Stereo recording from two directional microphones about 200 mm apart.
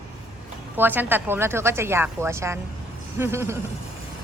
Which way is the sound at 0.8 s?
10° right (ahead or behind).